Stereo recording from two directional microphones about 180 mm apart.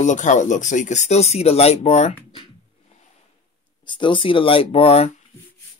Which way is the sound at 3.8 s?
25° left (ahead or behind).